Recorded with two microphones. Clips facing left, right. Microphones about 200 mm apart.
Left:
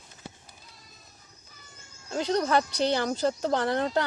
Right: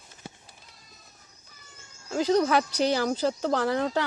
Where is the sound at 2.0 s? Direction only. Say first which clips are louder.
Right 4 dB; 5° right (ahead or behind).